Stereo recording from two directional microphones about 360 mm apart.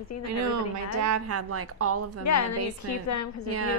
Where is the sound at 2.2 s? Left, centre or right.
Left.